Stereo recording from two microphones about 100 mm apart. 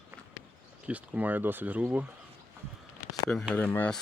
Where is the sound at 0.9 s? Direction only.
15° right (ahead or behind).